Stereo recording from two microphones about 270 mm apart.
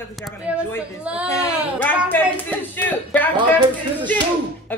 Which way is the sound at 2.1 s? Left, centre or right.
Centre.